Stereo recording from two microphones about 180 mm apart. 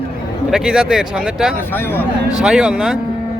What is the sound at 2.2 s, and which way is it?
Speech, 5° right (ahead or behind).